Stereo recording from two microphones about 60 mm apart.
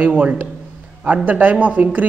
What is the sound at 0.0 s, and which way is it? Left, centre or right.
A man's voice, right.